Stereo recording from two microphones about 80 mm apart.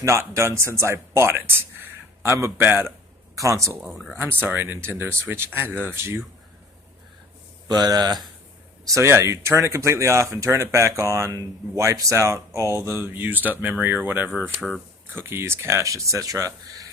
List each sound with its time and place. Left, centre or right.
0.0 s speech: right
3.3 s speech: right
4.2 s speech: right
7.7 s speech: right
8.8 s speech: right